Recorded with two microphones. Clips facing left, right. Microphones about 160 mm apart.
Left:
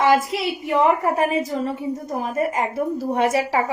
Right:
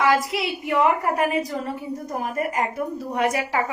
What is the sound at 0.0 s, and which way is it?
A woman's voice, 30° left (ahead or behind).